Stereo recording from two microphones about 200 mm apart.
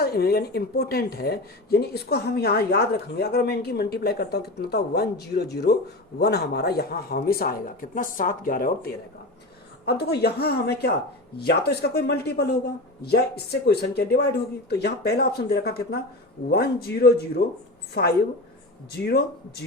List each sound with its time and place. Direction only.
0.0 s speech: 50° left (ahead or behind)